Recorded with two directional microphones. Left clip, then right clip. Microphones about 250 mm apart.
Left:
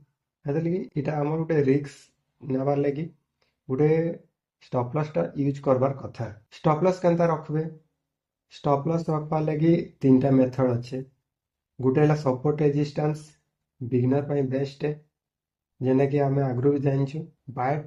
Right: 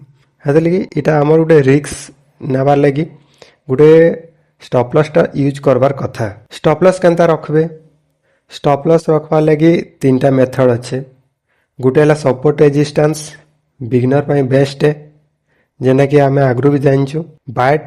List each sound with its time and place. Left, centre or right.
0.4 s a man's voice: right